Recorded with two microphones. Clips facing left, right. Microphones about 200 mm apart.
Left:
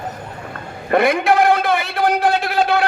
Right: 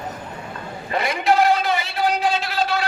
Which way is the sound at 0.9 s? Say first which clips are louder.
Left 5 dB; 55° left (ahead or behind).